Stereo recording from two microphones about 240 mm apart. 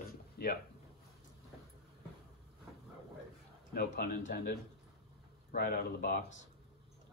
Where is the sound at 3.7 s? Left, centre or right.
Left.